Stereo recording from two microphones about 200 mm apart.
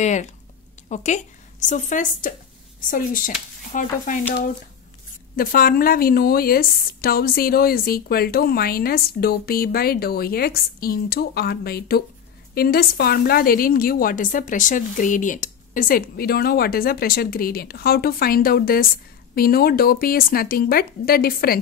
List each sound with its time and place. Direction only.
0.0 s a woman's voice: 35° left (ahead or behind)
5.3 s a woman's voice: 45° left (ahead or behind)